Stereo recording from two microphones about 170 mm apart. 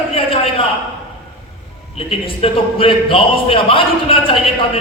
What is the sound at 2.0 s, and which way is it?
A man's voice, 35° left (ahead or behind).